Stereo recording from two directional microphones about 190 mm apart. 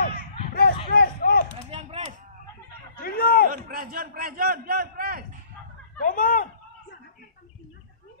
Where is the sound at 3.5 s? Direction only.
45° right (ahead or behind).